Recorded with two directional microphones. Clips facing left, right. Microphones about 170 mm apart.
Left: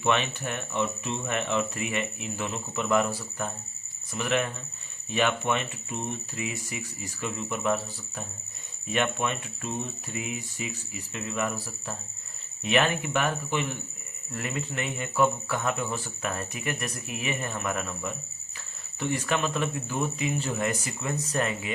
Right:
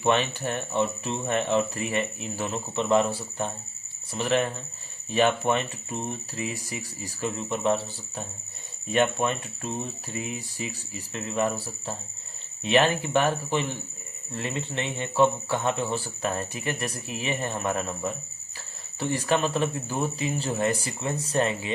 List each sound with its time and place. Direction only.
0.0 s a man's voice: 35° right (ahead or behind)